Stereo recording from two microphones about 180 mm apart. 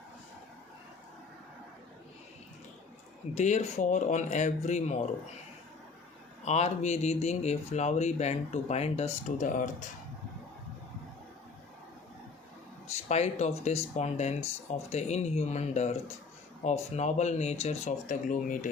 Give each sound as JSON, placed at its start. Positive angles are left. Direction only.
{"t": 3.3, "sound": "speech", "side_deg": 40}
{"t": 6.4, "sound": "speech", "side_deg": 35}
{"t": 13.1, "sound": "speech", "side_deg": 35}